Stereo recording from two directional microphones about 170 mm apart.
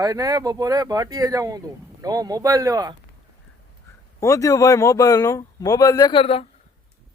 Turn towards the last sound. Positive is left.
turn(degrees=35)  # may be behind; listen again after turning